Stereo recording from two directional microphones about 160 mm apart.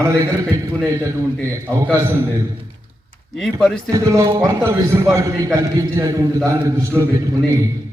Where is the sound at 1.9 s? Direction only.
15° right (ahead or behind).